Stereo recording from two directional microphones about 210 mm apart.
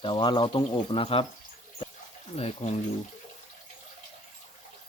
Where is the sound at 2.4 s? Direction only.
30° left (ahead or behind).